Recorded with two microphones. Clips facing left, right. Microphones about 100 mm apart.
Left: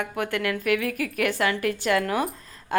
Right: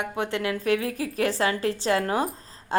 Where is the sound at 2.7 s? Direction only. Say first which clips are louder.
Left 1 dB; 25° right (ahead or behind).